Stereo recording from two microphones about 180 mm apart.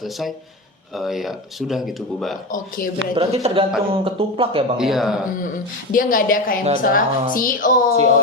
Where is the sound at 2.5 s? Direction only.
50° left (ahead or behind).